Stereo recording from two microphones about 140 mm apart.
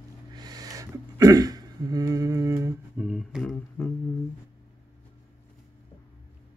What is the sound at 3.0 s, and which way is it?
Speech, centre (ahead or behind).